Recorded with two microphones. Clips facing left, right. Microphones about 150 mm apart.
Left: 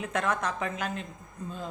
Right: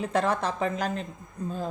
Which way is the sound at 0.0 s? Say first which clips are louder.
Right 4 dB; 35° right (ahead or behind).